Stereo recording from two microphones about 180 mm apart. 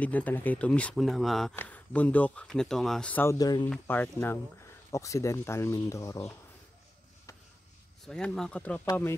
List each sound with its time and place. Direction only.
0.0 s speech: 10° left (ahead or behind)
3.7 s speech: 10° left (ahead or behind)
8.0 s speech: 5° left (ahead or behind)